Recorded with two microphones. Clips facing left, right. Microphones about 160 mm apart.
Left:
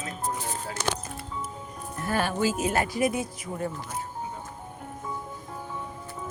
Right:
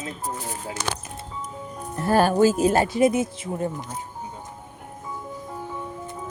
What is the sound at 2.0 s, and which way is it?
Speech, 35° right (ahead or behind).